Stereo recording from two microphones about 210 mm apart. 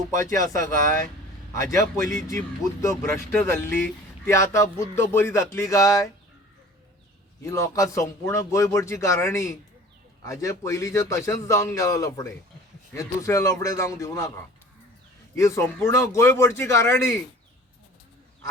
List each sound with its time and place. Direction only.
0.1 s a man's voice: 15° left (ahead or behind)
7.4 s a man's voice: 15° left (ahead or behind)
15.4 s a man's voice: 15° left (ahead or behind)